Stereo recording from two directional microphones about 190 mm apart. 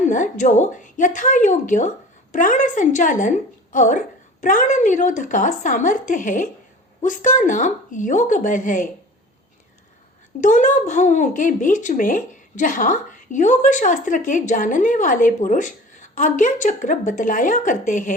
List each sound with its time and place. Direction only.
0.0 s a woman's voice: 40° left (ahead or behind)
10.4 s speech: 40° left (ahead or behind)